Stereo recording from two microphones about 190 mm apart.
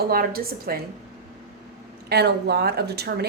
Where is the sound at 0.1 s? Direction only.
50° right (ahead or behind).